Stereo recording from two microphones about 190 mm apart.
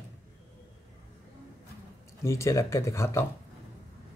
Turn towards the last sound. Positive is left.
turn(degrees=15)  # may be behind; listen again after turning